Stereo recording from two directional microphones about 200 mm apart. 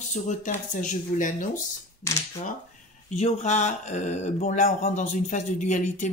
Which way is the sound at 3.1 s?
35° left (ahead or behind).